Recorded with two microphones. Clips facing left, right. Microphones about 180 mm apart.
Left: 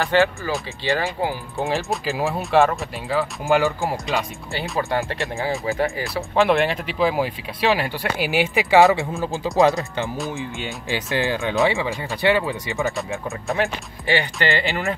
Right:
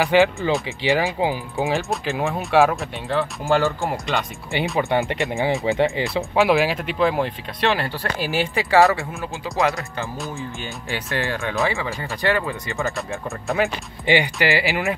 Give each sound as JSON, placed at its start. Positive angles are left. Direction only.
{"t": 0.0, "sound": "speech", "side_deg": -15}
{"t": 1.6, "sound": "speech", "side_deg": 0}
{"t": 4.7, "sound": "speech", "side_deg": -20}
{"t": 6.3, "sound": "speech", "side_deg": 0}
{"t": 12.7, "sound": "speech", "side_deg": 0}
{"t": 14.0, "sound": "speech", "side_deg": -15}
{"t": 14.5, "sound": "speech", "side_deg": 0}